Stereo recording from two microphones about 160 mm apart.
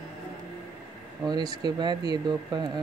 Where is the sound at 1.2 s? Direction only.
25° right (ahead or behind).